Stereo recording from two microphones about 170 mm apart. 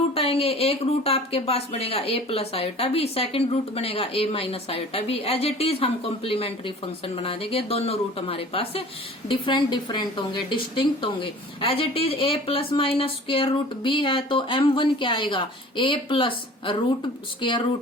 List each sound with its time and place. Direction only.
0.1 s a woman's voice: 35° left (ahead or behind)